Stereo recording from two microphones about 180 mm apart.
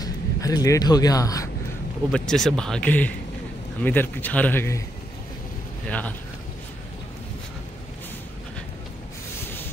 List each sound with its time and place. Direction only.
0.0 s speech: 20° left (ahead or behind)
2.1 s a man's voice: 5° left (ahead or behind)
5.9 s a man's voice: 5° left (ahead or behind)